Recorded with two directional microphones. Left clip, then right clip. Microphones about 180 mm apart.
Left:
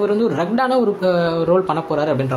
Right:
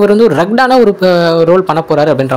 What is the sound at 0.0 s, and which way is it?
A man's voice, 45° right (ahead or behind).